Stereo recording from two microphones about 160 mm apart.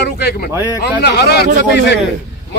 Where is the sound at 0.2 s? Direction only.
85° left.